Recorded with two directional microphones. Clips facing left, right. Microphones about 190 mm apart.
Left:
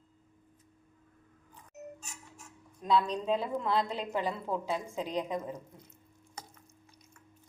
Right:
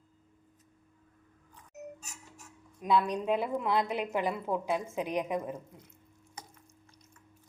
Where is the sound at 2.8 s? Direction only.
15° right (ahead or behind).